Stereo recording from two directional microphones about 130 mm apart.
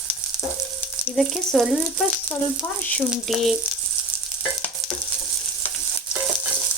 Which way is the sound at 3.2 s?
Centre (ahead or behind).